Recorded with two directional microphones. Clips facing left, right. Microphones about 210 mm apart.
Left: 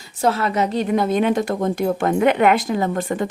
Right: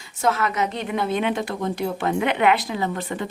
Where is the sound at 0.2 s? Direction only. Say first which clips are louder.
Left 3 dB; 30° left (ahead or behind).